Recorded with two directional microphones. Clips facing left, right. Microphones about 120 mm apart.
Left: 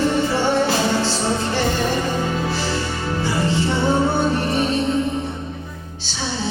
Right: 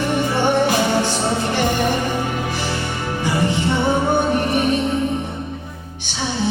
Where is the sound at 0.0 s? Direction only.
15° right (ahead or behind).